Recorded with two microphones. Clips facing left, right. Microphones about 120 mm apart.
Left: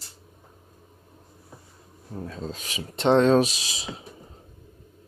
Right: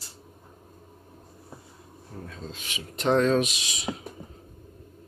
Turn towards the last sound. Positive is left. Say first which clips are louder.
# left 4 dB
turn(degrees=35)  # may be behind; listen again after turning